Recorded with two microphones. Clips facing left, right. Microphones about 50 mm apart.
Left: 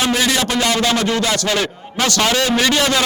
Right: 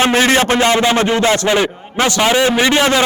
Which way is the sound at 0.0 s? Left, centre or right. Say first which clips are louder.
Right 5 dB; right.